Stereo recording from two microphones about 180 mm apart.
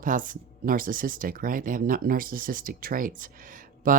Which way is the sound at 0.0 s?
50° right (ahead or behind).